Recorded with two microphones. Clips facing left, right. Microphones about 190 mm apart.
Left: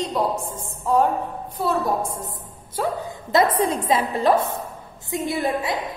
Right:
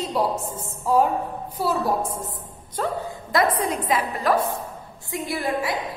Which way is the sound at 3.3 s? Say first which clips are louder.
Left 3 dB; 25° left (ahead or behind).